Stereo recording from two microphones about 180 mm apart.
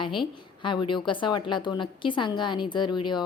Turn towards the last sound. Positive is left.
turn(degrees=25)  # may be behind; listen again after turning